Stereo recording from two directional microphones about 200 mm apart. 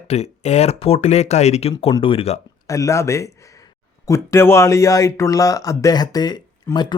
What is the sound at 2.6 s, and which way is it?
Speech, 15° left (ahead or behind).